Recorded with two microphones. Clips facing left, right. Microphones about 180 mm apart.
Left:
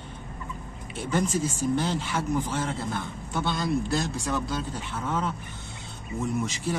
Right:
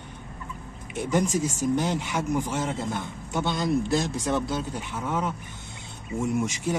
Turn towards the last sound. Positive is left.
turn(degrees=-15)  # may be behind; listen again after turning